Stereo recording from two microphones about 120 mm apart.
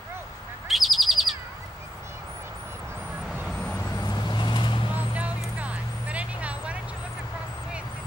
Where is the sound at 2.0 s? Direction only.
20° right (ahead or behind).